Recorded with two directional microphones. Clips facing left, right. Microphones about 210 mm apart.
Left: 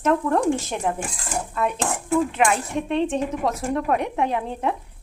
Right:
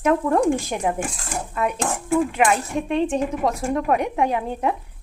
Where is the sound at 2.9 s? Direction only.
10° right (ahead or behind).